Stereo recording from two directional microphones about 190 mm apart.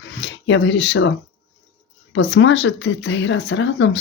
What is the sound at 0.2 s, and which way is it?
Speech, 75° left (ahead or behind).